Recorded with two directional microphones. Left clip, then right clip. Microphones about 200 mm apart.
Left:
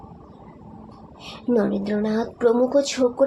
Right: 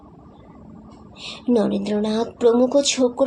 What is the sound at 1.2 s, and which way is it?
A woman's voice, 30° right (ahead or behind).